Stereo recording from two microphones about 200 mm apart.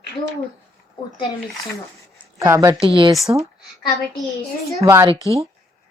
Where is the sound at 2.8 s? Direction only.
25° right (ahead or behind).